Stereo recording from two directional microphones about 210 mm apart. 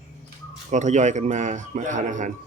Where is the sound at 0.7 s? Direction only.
35° right (ahead or behind).